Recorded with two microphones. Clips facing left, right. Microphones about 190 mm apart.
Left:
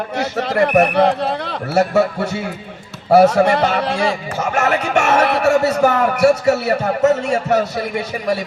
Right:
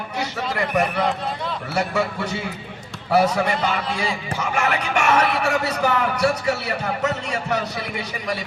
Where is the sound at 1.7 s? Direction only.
45° left (ahead or behind).